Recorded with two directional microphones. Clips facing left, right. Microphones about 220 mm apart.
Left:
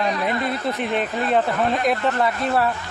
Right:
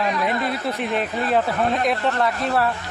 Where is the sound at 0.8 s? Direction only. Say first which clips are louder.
Even; centre (ahead or behind).